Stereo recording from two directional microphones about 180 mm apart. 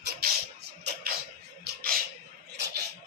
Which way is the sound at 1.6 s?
55° right (ahead or behind).